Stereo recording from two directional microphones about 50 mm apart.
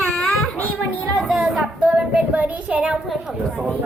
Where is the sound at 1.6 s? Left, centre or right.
Right.